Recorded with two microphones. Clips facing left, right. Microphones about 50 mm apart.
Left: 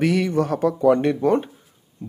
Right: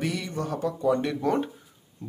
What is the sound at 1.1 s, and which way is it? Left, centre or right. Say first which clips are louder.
Speech: left 6 dB; centre.